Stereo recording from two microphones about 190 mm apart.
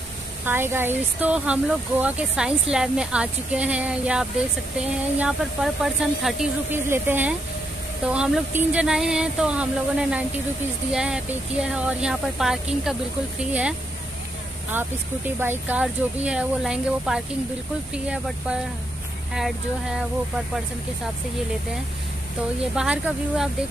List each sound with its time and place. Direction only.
0.5 s speech: 10° right (ahead or behind)
22.8 s speech: 5° right (ahead or behind)